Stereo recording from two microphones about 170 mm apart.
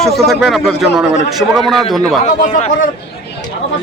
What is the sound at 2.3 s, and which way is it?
Speech, 45° left (ahead or behind).